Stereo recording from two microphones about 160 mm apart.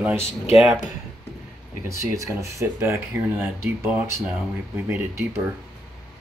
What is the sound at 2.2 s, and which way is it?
Speech, 20° right (ahead or behind).